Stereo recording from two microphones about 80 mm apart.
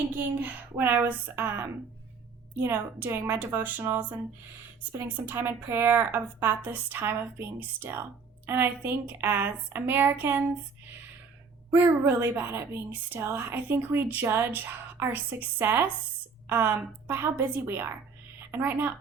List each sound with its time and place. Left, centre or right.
0.4 s a woman's voice: right
4.9 s a woman's voice: right
11.7 s a woman's voice: right